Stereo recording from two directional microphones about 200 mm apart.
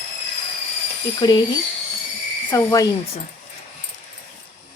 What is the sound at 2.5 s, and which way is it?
Speech, 15° left (ahead or behind).